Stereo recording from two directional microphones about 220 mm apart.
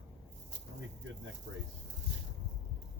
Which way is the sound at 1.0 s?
60° right (ahead or behind).